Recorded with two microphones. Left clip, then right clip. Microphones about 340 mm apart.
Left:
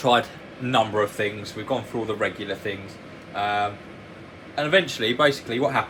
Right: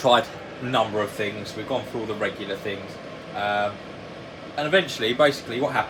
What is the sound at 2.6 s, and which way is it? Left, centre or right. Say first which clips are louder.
Speech: right 1 dB; centre.